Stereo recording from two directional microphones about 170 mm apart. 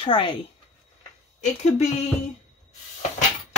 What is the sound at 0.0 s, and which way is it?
Speech, 30° left (ahead or behind).